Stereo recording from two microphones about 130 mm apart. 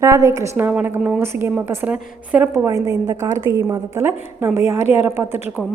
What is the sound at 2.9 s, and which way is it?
A woman's voice, 25° right (ahead or behind).